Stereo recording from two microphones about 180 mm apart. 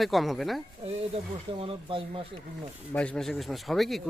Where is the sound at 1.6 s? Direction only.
30° right (ahead or behind).